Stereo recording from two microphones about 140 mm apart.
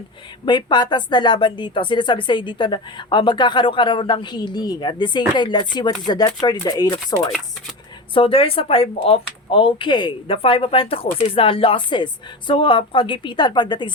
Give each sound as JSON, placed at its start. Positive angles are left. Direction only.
{"t": 0.4, "sound": "a woman's voice", "side_deg": 30}
{"t": 8.1, "sound": "a woman's voice", "side_deg": 40}